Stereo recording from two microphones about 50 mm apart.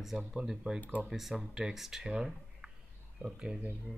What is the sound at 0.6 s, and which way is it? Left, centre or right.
Speech, right.